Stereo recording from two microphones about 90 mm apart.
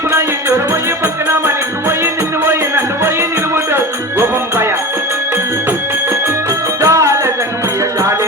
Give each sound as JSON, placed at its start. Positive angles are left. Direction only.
{"t": 0.1, "sound": "music", "side_deg": -30}
{"t": 6.8, "sound": "music", "side_deg": -35}